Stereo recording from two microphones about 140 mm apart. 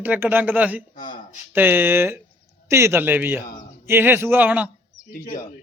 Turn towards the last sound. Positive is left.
turn(degrees=85)